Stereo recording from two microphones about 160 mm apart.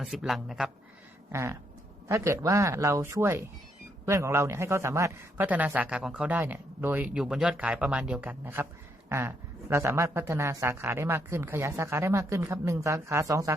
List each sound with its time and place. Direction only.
0.0 s speech: centre (ahead or behind)
1.3 s a man's voice: 15° right (ahead or behind)